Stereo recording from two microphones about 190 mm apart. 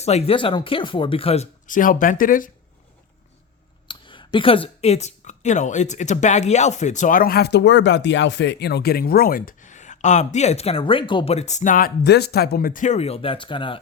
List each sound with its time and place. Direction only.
0.0 s a woman's voice: 35° left (ahead or behind)
3.8 s a woman's voice: 25° left (ahead or behind); by 11.9 s 45° left (ahead or behind)
12.0 s a woman's voice: 60° left (ahead or behind); by 13.8 s 25° left (ahead or behind)